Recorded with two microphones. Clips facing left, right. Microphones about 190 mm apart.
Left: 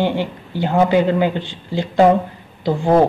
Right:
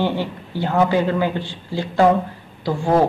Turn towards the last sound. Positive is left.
turn(degrees=20)  # may be behind; listen again after turning